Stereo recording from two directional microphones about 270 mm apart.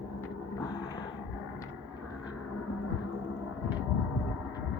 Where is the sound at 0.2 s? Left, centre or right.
Centre.